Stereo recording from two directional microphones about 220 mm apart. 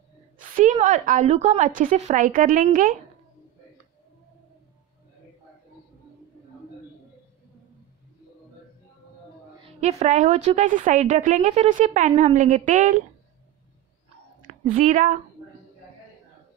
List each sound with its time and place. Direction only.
0.4 s a woman's voice: 35° right (ahead or behind)
9.8 s a woman's voice: 30° right (ahead or behind)
14.4 s a woman's voice: 35° right (ahead or behind)